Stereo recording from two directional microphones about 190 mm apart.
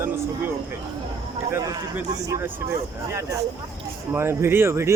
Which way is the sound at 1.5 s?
15° right (ahead or behind).